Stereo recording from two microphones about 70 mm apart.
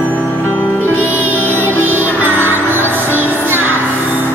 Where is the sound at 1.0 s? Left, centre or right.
Left.